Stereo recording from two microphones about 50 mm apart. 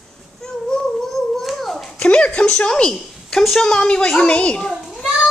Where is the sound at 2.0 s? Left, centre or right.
Left.